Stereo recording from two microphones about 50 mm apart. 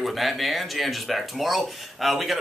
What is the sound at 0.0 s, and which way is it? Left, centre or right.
Speech, centre.